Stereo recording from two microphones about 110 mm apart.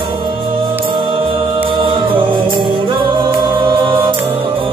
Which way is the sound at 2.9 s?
45° right (ahead or behind).